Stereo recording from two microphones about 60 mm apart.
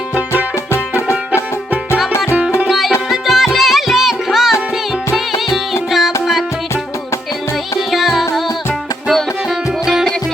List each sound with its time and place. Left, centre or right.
0.7 s music: left
2.6 s music: centre
5.9 s music: centre
7.9 s music: centre